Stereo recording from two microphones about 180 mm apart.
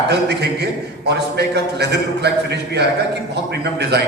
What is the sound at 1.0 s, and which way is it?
A man's voice, 70° right (ahead or behind).